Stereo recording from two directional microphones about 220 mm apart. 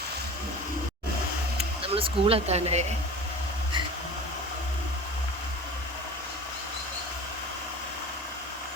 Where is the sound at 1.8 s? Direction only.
25° right (ahead or behind).